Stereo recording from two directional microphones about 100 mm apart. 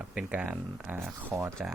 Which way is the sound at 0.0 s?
10° right (ahead or behind).